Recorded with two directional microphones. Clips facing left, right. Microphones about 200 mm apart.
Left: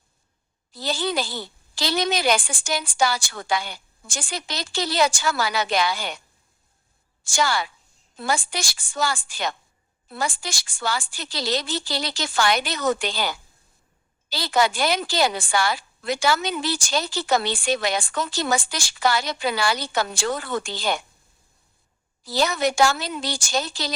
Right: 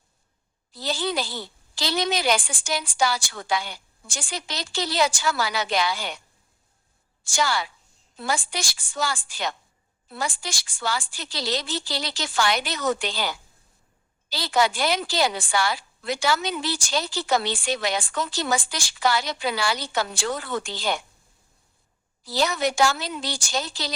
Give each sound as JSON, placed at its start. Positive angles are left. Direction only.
{"t": 0.7, "sound": "a woman's voice", "side_deg": 50}
{"t": 7.3, "sound": "a woman's voice", "side_deg": 50}
{"t": 22.2, "sound": "a woman's voice", "side_deg": 45}